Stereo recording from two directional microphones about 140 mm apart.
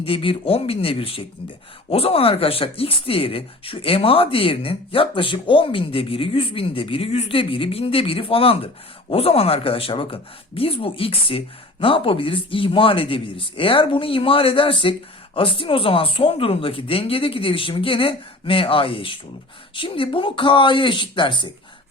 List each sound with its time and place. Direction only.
0.0 s speech: 40° left (ahead or behind)